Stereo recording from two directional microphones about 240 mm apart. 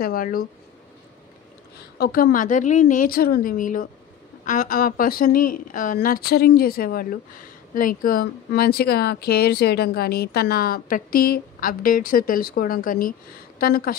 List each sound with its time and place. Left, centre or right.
0.0 s speech: left
2.0 s speech: left